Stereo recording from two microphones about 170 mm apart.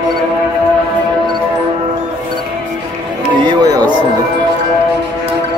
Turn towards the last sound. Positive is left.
turn(degrees=-25)  # may be behind; listen again after turning